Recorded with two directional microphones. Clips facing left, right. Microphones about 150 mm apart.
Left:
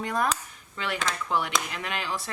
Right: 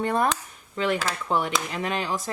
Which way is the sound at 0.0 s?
30° right (ahead or behind).